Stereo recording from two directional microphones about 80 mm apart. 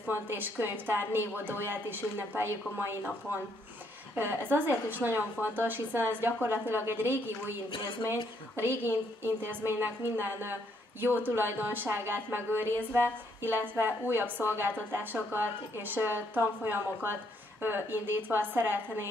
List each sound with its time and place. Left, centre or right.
0.0 s a woman's voice: right
8.5 s a woman's voice: right